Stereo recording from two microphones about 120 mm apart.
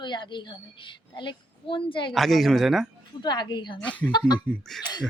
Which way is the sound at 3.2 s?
40° left (ahead or behind).